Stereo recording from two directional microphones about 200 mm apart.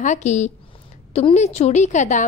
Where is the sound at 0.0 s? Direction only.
35° left (ahead or behind).